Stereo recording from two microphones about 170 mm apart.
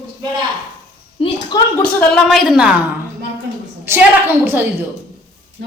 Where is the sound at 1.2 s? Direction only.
25° left (ahead or behind).